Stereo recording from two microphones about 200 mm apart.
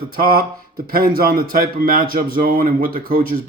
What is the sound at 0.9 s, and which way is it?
Speech, 45° right (ahead or behind).